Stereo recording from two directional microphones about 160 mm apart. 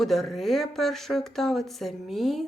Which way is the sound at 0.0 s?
Centre (ahead or behind).